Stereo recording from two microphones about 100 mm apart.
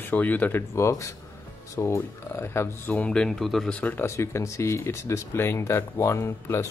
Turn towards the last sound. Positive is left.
turn(degrees=25)  # may be behind; listen again after turning